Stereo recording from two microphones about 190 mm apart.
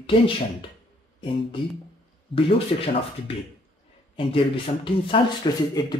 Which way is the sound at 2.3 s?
30° left (ahead or behind).